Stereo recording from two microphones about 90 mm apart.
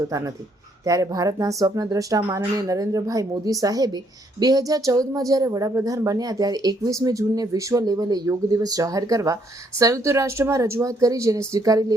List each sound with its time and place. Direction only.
0.1 s speech: 40° right (ahead or behind)